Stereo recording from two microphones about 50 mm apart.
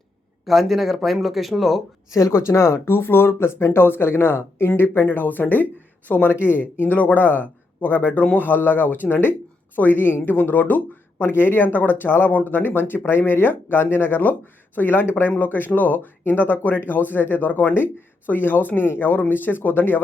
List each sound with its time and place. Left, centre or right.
0.4 s speech: centre
2.0 s speech: left
2.8 s speech: left
6.4 s speech: left